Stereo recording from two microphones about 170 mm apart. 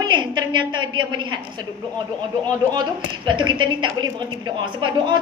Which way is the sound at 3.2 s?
25° right (ahead or behind).